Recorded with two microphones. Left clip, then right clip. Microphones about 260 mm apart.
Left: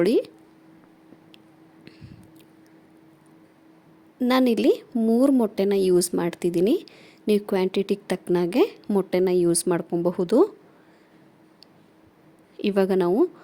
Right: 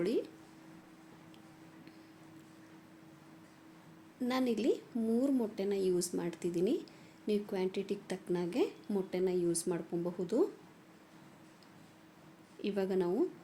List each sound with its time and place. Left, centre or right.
0.0 s a woman's voice: left
4.2 s a woman's voice: left
12.5 s a woman's voice: left